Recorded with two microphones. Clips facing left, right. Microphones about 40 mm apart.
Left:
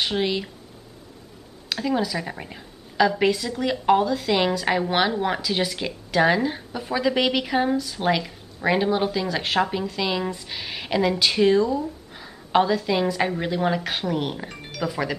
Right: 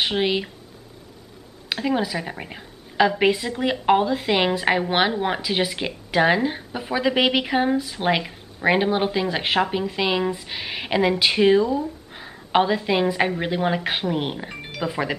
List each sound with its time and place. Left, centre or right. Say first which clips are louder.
0.0 s speech: right 2 dB; right
1.7 s a woman's voice: right 1 dB; right
12.1 s a sound: even; right
13.4 s a woman's voice: right 1 dB; right